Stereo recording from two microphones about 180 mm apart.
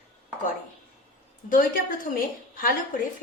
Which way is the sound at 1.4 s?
50° left (ahead or behind).